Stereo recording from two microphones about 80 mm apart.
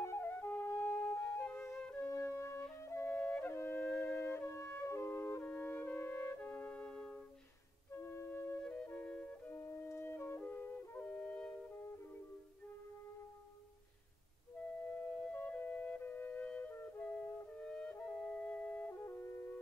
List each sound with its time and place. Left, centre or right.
0.0 s flute: left
1.2 s music: centre
2.0 s flute: left
3.1 s flute: centre
3.5 s wind instrument: left
4.0 s flute: left
7.9 s music: left
8.6 s flute: centre
14.9 s music: centre
15.3 s flute: left